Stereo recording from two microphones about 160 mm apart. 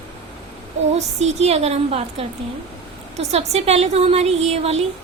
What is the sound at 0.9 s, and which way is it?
A woman's voice, 45° right (ahead or behind).